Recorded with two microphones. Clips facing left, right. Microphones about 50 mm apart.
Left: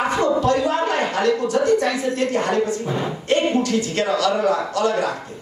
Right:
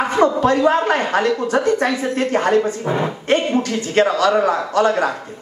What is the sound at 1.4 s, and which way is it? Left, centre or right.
Speech, right.